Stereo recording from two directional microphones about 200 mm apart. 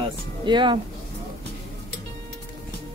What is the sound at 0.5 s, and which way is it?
Speech, 25° right (ahead or behind).